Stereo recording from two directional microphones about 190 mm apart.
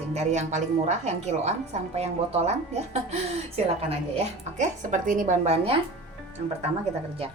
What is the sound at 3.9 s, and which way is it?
A woman's voice, 35° right (ahead or behind).